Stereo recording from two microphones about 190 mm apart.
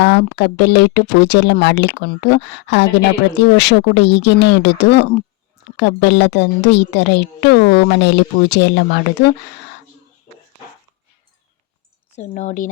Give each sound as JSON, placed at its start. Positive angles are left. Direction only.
{"t": 0.0, "sound": "a woman's voice", "side_deg": 65}
{"t": 12.1, "sound": "speech", "side_deg": 40}